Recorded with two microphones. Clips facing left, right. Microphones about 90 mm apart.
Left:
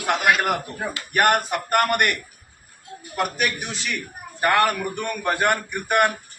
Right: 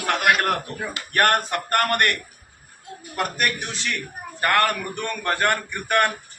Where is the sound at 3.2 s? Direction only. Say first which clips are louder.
Left 1 dB; 5° left (ahead or behind).